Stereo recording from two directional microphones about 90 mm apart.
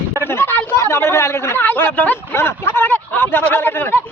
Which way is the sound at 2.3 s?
25° left (ahead or behind).